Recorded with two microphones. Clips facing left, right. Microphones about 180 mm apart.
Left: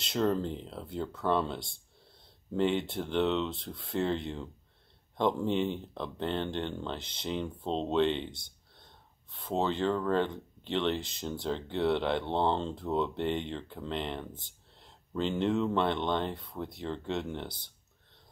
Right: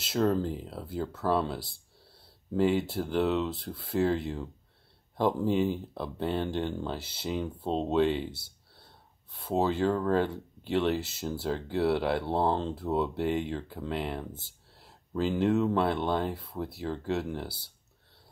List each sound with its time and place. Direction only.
0.0 s speech: 5° right (ahead or behind)